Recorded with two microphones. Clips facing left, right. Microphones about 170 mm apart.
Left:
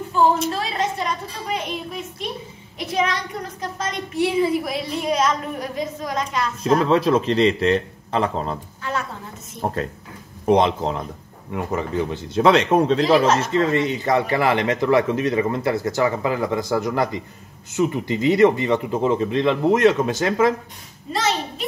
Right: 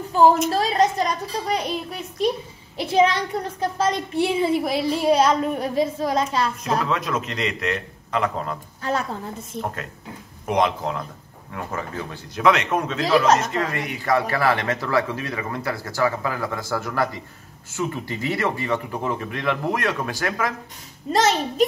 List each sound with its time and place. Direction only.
0.5 s a woman's voice: 40° right (ahead or behind)
6.6 s a man's voice: 30° left (ahead or behind)
10.4 s a man's voice: 30° left (ahead or behind)
21.1 s a child's voice: 45° right (ahead or behind)